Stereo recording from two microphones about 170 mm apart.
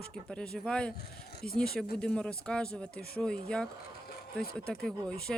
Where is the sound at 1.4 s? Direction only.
60° left (ahead or behind).